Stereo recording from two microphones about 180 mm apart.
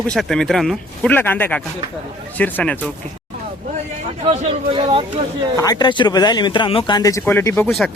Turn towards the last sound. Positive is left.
turn(degrees=10)  # may be behind; listen again after turning